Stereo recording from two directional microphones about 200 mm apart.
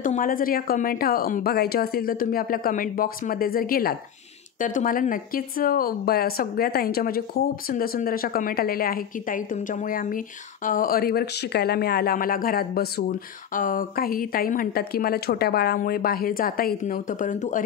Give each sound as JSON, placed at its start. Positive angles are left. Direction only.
{"t": 0.0, "sound": "speech", "side_deg": 40}